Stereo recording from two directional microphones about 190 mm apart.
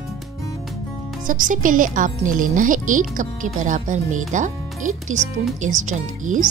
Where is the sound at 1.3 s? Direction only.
45° right (ahead or behind).